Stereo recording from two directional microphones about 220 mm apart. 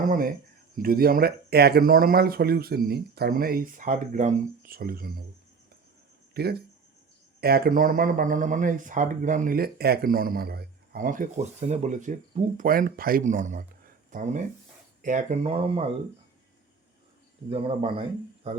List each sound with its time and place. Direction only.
0.0 s speech: 40° right (ahead or behind)
6.3 s speech: 45° right (ahead or behind); by 15.8 s 25° right (ahead or behind)
17.5 s speech: 25° right (ahead or behind)